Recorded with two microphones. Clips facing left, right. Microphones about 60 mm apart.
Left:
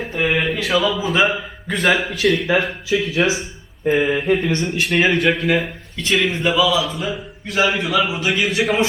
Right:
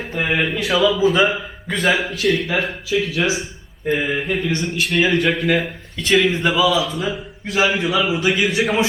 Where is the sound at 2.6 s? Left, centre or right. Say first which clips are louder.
Even; centre.